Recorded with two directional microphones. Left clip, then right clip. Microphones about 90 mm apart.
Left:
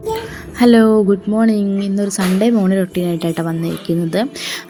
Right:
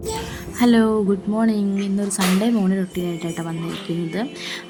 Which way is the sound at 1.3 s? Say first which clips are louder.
Left 5 dB; 15° left (ahead or behind).